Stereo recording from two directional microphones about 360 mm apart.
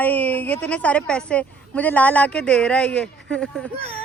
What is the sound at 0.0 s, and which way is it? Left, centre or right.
A woman's voice, centre.